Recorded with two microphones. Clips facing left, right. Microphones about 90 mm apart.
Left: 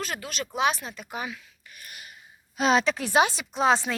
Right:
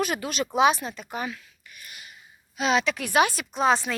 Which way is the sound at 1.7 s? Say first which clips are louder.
Left 1 dB; 45° left (ahead or behind).